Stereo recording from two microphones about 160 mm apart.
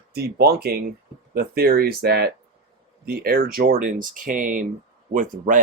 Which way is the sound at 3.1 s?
65° right (ahead or behind).